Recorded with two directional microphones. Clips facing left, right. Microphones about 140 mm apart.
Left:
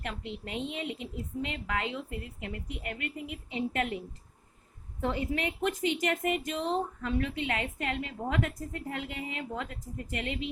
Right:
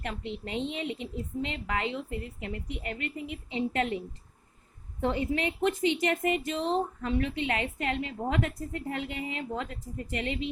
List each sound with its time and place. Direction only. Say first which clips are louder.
0.0 s a woman's voice: right 2 dB; 30° right (ahead or behind)
4.9 s a woman's voice: right 3 dB; 30° right (ahead or behind)